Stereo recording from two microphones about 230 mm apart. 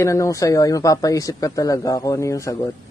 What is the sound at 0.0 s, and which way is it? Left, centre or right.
Speech, centre.